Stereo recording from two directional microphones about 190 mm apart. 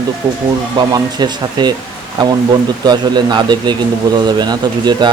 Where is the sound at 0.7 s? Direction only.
20° right (ahead or behind).